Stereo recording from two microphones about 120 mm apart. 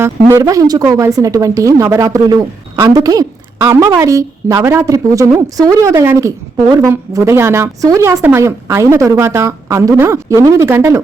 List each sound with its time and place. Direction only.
0.0 s a woman's voice: 25° right (ahead or behind)